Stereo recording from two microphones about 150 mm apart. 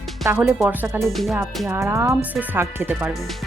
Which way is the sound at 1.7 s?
15° right (ahead or behind).